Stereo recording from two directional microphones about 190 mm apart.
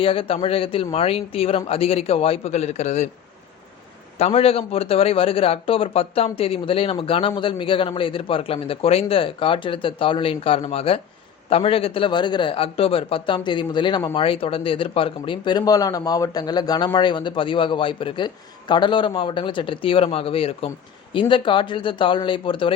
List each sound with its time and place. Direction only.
0.0 s speech: 30° left (ahead or behind)
4.2 s speech: 30° left (ahead or behind)